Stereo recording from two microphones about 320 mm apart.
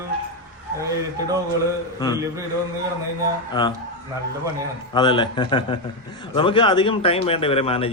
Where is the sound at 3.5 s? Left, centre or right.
Centre.